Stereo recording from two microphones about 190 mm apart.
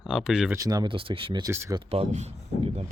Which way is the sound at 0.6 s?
20° right (ahead or behind).